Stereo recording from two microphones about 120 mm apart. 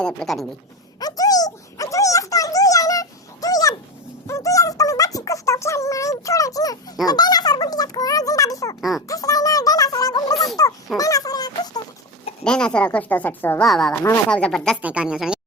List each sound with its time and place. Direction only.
0.0 s speech: 5° left (ahead or behind)
0.9 s a sound: 30° left (ahead or behind)
4.3 s music: 25° left (ahead or behind)
7.0 s a sound: 35° left (ahead or behind)
8.8 s a child's voice: centre (ahead or behind)
9.0 s a sound: 30° left (ahead or behind)
12.5 s speech: 5° left (ahead or behind)
13.7 s speech: 5° left (ahead or behind)
14.8 s speech: 10° right (ahead or behind)